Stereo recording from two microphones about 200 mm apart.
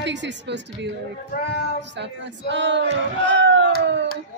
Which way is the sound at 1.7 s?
60° right (ahead or behind).